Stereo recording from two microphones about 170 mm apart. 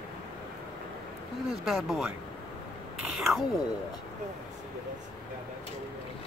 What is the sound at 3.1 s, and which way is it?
Speech, centre (ahead or behind).